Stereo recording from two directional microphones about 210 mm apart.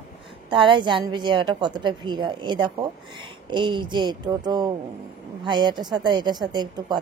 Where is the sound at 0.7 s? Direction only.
20° right (ahead or behind).